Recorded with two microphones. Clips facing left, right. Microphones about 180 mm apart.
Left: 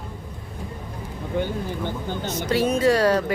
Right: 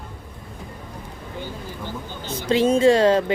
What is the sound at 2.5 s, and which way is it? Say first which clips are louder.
Speech: right 4 dB; 25° right (ahead or behind).